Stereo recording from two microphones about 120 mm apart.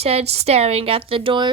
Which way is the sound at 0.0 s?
60° right (ahead or behind).